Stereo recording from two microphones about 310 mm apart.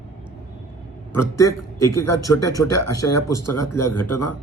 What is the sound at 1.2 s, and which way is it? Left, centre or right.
A man's voice, left.